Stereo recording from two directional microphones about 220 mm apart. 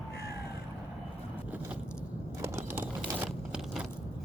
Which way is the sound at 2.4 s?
15° right (ahead or behind).